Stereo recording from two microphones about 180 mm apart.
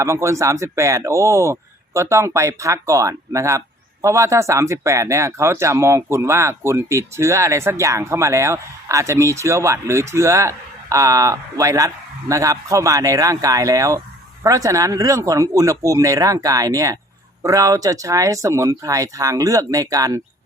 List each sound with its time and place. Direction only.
0.0 s speech: 15° right (ahead or behind)